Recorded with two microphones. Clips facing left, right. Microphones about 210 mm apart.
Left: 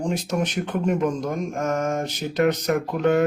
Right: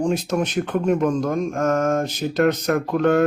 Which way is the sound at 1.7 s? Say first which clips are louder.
Right 4 dB; 15° left (ahead or behind).